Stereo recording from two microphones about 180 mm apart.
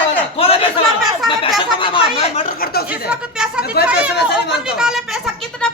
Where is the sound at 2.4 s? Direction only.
60° left (ahead or behind).